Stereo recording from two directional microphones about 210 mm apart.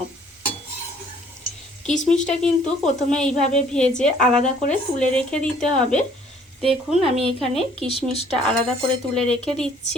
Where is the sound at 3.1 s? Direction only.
5° left (ahead or behind).